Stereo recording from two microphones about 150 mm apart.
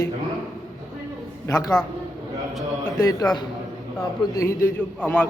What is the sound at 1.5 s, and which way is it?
Speech, 20° left (ahead or behind).